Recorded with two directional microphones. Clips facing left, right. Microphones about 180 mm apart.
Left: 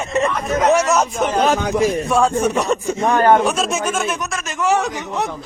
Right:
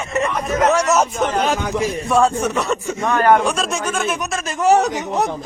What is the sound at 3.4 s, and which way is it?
Speech, centre (ahead or behind).